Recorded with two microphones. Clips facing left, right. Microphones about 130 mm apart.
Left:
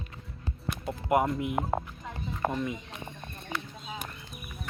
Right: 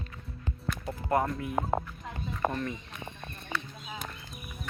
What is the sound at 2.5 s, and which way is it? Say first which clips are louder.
Speech: left 2 dB; 10° left (ahead or behind).